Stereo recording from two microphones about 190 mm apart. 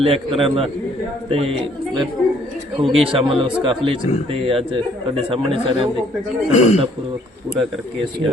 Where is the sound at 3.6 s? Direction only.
25° right (ahead or behind).